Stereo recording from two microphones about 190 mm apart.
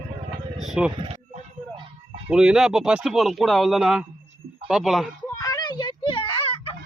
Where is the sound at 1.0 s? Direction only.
30° right (ahead or behind).